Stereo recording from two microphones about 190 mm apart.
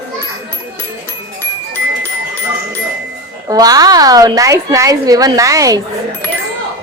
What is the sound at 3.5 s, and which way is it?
A woman's voice, 20° right (ahead or behind).